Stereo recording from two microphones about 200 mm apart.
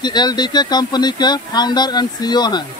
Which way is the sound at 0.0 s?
20° left (ahead or behind).